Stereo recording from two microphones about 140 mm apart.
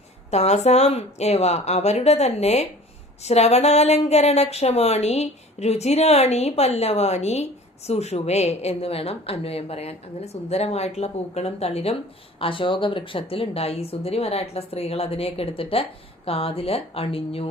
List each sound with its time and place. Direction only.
0.3 s speech: 50° left (ahead or behind)